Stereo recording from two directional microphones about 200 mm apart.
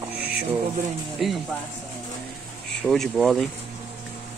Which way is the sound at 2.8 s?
Centre (ahead or behind).